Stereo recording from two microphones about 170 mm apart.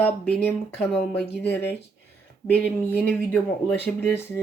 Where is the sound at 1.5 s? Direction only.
80° left.